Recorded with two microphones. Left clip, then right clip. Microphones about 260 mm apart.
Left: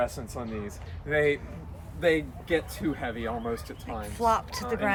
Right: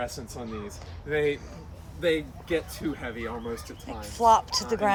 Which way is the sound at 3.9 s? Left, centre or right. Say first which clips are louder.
Right 5 dB; centre.